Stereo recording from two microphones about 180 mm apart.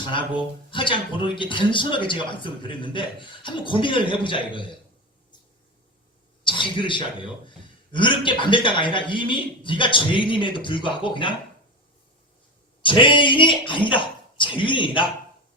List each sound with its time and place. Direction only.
0.1 s speech: 25° left (ahead or behind)
6.4 s a man's voice: 25° left (ahead or behind)
12.8 s speech: 25° left (ahead or behind)